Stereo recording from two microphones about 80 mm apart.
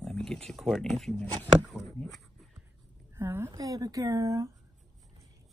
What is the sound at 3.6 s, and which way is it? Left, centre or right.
Speech, right.